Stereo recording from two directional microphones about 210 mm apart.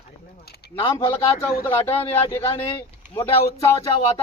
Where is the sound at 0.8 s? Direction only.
25° left (ahead or behind).